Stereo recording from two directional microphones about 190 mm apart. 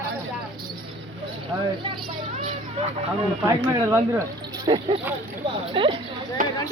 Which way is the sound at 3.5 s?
15° right (ahead or behind).